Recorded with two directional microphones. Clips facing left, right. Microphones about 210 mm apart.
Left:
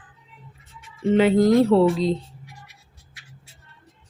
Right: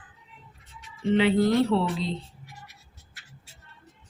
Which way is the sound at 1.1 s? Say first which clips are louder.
Left 5 dB; 45° left (ahead or behind).